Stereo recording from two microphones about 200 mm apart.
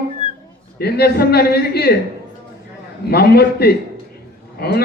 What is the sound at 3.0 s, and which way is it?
A man's voice, 50° left (ahead or behind).